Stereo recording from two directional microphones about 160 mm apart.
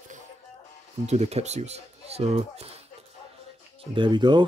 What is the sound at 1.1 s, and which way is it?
Speech, 45° right (ahead or behind).